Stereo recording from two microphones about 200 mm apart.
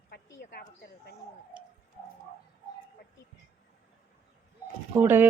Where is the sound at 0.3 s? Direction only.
55° left (ahead or behind).